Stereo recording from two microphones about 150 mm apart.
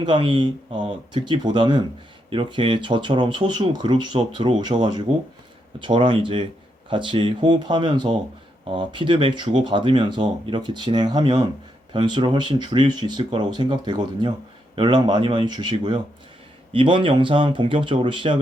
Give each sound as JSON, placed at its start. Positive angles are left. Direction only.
{"t": 0.0, "sound": "speech", "side_deg": -35}